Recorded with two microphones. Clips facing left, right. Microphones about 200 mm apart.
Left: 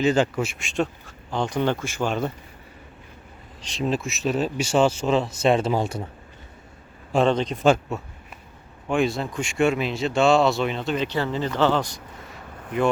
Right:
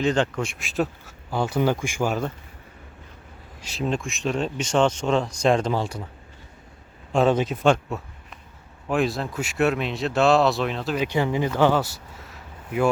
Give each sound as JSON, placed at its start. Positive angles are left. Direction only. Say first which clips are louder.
{"t": 0.0, "sound": "speech", "louder": "left 2 dB", "side_deg": 5}
{"t": 3.6, "sound": "speech", "louder": "left 1 dB", "side_deg": -5}
{"t": 5.8, "sound": "a man's voice", "louder": "left 3 dB", "side_deg": 25}
{"t": 7.1, "sound": "speech", "louder": "even", "side_deg": -5}